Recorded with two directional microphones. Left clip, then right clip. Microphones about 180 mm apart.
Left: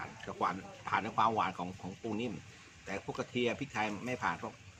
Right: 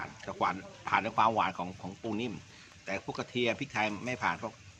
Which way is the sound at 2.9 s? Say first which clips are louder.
Right 3 dB; 30° right (ahead or behind).